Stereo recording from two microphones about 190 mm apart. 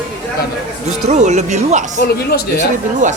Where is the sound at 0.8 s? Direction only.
35° right (ahead or behind).